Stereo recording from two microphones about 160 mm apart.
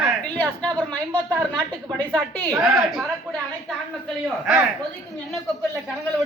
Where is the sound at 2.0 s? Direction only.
10° left (ahead or behind).